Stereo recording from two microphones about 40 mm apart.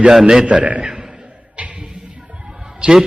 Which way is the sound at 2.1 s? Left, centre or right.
Right.